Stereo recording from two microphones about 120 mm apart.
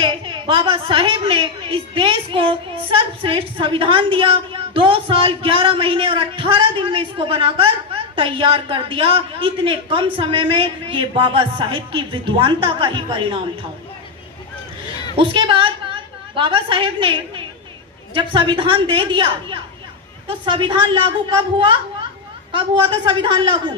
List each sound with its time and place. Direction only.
0.0 s a woman's voice: 45° right (ahead or behind)
15.1 s a woman's voice: 45° right (ahead or behind)